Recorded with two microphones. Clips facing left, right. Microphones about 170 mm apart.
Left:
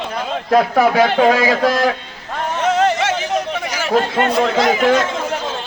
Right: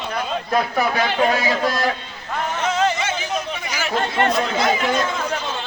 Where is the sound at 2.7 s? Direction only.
75° left (ahead or behind).